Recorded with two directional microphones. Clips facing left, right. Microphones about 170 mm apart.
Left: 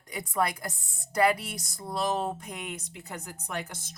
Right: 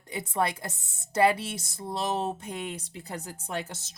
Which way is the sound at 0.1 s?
25° right (ahead or behind).